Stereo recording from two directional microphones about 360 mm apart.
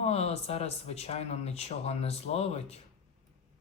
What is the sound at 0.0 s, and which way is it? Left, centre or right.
Speech, centre.